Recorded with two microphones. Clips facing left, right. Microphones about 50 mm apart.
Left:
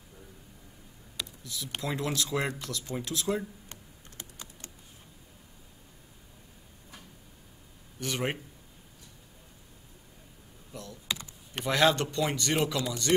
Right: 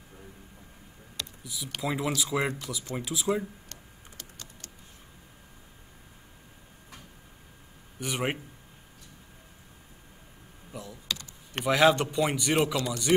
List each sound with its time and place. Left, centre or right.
1.4 s a man's voice: centre
4.2 s typing: centre
8.0 s a man's voice: centre
10.7 s computer keyboard: centre
11.6 s a man's voice: centre
12.7 s speech: centre